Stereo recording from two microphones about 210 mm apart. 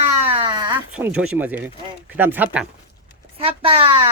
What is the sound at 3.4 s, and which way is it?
Speech, 25° right (ahead or behind).